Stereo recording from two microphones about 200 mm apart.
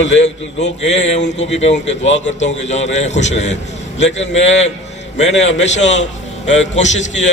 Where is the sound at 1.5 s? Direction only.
35° left (ahead or behind).